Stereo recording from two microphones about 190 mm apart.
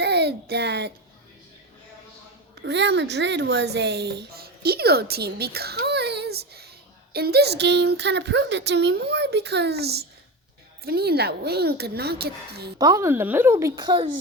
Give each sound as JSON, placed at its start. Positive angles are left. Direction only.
{"t": 0.0, "sound": "a child's voice", "side_deg": -60}
{"t": 2.6, "sound": "a woman's voice", "side_deg": -65}
{"t": 12.8, "sound": "speech", "side_deg": -15}